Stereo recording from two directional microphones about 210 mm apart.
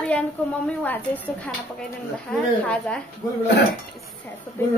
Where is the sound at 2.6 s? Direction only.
5° left (ahead or behind).